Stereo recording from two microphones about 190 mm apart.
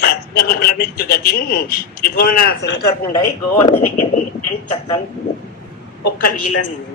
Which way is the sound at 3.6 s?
35° left (ahead or behind).